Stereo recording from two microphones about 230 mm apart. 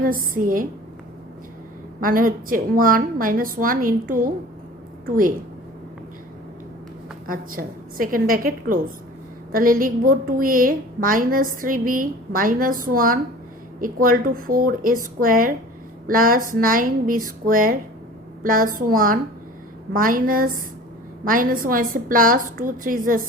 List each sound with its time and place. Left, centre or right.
0.0 s a woman's voice: right
2.0 s a woman's voice: right
7.3 s a woman's voice: right